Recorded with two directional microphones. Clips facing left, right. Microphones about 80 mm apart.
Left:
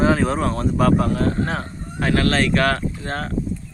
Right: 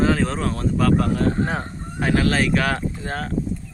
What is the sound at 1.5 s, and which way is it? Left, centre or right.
Fowl, centre.